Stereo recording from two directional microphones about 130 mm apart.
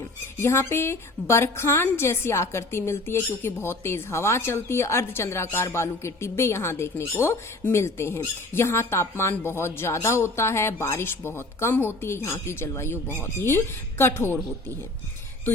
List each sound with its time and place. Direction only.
0.3 s a woman's voice: 20° left (ahead or behind)